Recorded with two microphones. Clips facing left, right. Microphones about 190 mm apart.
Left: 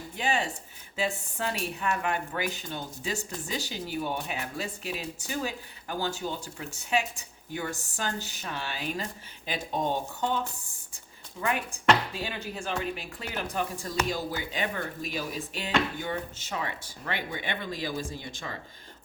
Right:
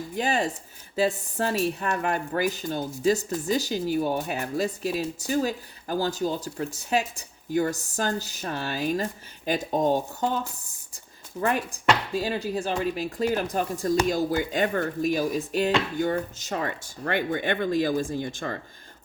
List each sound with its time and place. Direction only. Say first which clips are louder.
0.2 s speech: right 4 dB; 40° right (ahead or behind)